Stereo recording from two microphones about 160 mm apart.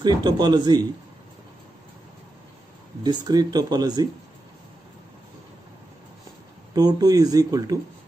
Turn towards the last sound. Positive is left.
turn(degrees=-25)  # may be behind; listen again after turning